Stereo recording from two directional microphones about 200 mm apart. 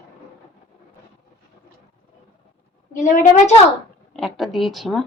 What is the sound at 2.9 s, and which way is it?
Speech, 40° left (ahead or behind).